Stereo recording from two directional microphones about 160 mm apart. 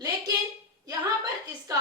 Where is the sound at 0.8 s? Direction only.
20° right (ahead or behind).